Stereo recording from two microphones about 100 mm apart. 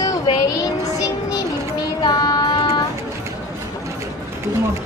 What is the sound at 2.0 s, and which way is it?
Music, 45° left (ahead or behind).